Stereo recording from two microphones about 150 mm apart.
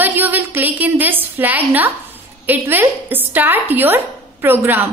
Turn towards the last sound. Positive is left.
turn(degrees=-15)  # may be behind; listen again after turning